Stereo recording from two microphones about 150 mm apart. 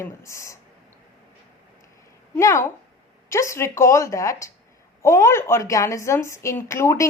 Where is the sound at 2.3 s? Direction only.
20° left (ahead or behind).